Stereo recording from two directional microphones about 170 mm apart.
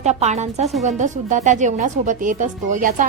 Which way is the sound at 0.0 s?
40° right (ahead or behind).